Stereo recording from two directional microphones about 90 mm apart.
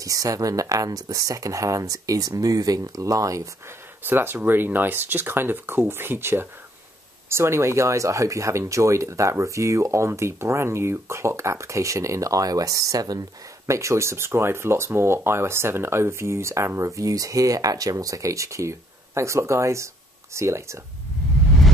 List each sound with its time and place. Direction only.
0.0 s speech: 40° right (ahead or behind)
4.0 s speech: 25° right (ahead or behind); by 13.2 s 45° right (ahead or behind)
13.7 s speech: 35° right (ahead or behind)